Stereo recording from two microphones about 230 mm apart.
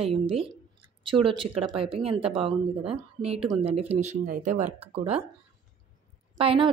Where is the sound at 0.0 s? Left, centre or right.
Right.